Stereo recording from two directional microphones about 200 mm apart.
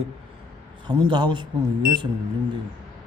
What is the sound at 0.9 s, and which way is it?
Speech, 20° right (ahead or behind).